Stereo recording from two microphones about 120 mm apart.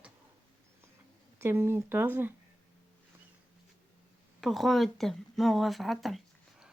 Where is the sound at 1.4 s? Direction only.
20° right (ahead or behind).